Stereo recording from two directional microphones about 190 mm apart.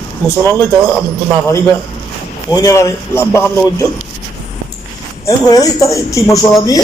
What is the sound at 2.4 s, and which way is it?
Speech, 20° left (ahead or behind).